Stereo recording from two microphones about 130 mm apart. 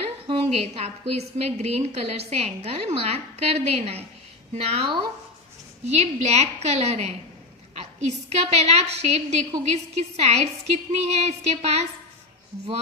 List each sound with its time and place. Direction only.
0.3 s a woman's voice: 45° right (ahead or behind)